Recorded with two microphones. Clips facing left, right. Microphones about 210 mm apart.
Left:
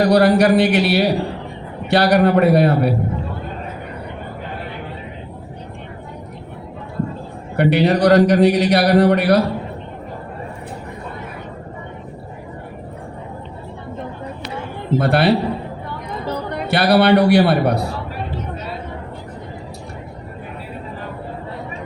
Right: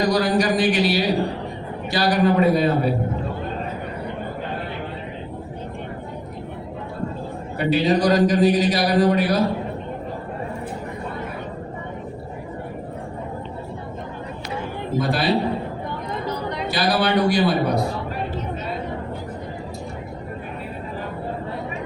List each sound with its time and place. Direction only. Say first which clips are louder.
0.0 s a man's voice: left 6 dB; 65° left (ahead or behind)
7.5 s a man's voice: left 4 dB; 65° left (ahead or behind)
14.9 s a man's voice: left 6 dB; 65° left (ahead or behind)
16.5 s a man's voice: left 7 dB; 60° left (ahead or behind)